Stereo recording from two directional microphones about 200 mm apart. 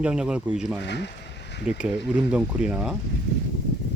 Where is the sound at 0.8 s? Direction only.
60° left (ahead or behind).